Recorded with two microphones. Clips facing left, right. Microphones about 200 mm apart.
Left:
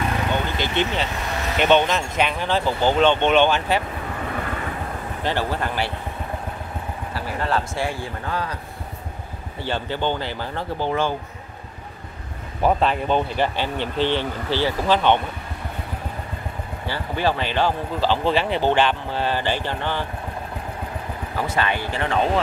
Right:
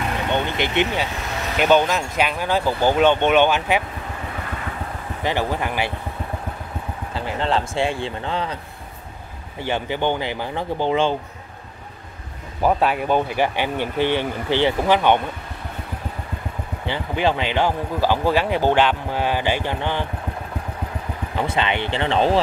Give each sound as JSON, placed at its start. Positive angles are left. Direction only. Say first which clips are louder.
{"t": 0.3, "sound": "vehicle", "louder": "right 2 dB", "side_deg": -20}
{"t": 1.6, "sound": "speech", "louder": "right 1 dB", "side_deg": -5}
{"t": 5.2, "sound": "speech", "louder": "right 2 dB", "side_deg": -15}
{"t": 7.2, "sound": "speech", "louder": "right 2 dB", "side_deg": -20}
{"t": 9.6, "sound": "speech", "louder": "right 2 dB", "side_deg": -15}
{"t": 12.6, "sound": "speech", "louder": "right 1 dB", "side_deg": -10}
{"t": 16.8, "sound": "speech", "louder": "right 2 dB", "side_deg": -20}
{"t": 21.5, "sound": "speech", "louder": "right 1 dB", "side_deg": -20}